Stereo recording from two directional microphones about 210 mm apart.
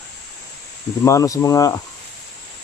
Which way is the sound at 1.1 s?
15° left (ahead or behind).